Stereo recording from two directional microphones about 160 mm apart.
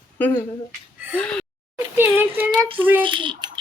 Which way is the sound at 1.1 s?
5° left (ahead or behind).